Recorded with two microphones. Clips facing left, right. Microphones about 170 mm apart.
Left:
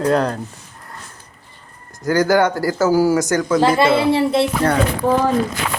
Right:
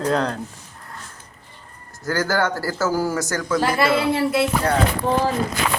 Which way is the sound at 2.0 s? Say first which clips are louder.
Left 7 dB; 15° left (ahead or behind).